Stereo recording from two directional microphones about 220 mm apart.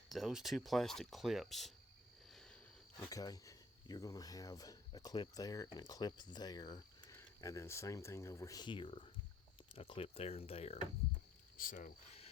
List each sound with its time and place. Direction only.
0.1 s speech: centre (ahead or behind)
2.3 s a sound: 5° left (ahead or behind)
3.0 s speech: 15° left (ahead or behind)
11.5 s speech: 40° left (ahead or behind)